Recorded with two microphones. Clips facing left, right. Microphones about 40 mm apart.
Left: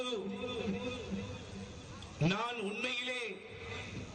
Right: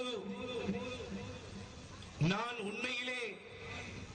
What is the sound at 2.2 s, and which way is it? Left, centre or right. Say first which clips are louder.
Speech: left 2 dB; left.